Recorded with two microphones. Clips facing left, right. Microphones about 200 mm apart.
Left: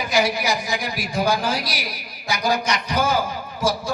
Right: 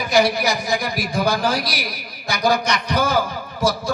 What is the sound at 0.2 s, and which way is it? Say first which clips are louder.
A woman's voice: right 3 dB; 40° right (ahead or behind).